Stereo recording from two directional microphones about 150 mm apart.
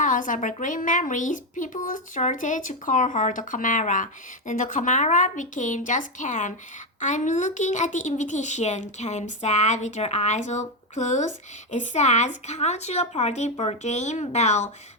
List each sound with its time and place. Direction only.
0.0 s a woman's voice: 60° left (ahead or behind)